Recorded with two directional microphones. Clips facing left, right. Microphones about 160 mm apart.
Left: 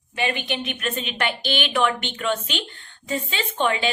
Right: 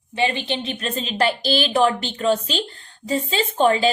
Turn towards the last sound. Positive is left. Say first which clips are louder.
# right 6 dB
turn(degrees=-35)  # may be behind; listen again after turning